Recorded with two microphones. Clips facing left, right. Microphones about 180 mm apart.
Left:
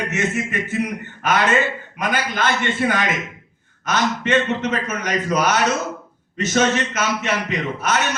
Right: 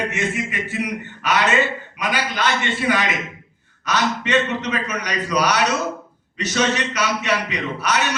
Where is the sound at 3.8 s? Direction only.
50° left (ahead or behind).